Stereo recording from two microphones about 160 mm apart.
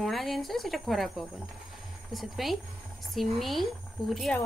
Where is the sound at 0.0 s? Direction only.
Centre (ahead or behind).